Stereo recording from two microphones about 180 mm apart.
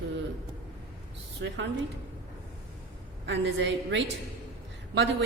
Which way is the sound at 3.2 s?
85° right.